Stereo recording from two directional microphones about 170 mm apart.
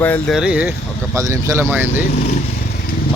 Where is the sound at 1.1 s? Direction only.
15° right (ahead or behind).